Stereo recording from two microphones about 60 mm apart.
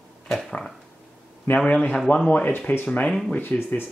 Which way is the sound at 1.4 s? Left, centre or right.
Left.